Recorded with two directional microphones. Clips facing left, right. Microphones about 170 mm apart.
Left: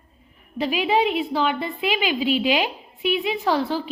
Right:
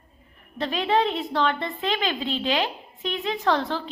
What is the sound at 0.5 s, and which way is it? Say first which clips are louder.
A woman's voice: left 2 dB; 10° left (ahead or behind).